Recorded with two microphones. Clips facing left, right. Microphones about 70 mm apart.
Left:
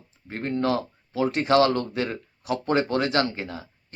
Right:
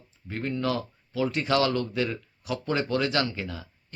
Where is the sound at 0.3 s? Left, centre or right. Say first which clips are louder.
Left 3 dB; left.